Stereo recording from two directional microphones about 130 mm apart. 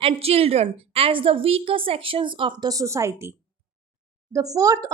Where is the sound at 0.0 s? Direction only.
50° right (ahead or behind).